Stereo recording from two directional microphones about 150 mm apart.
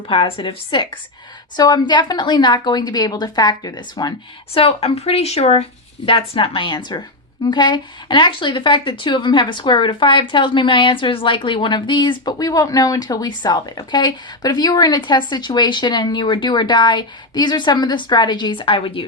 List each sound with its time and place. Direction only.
0.1 s a woman's voice: 35° left (ahead or behind)
4.5 s speech: 40° left (ahead or behind)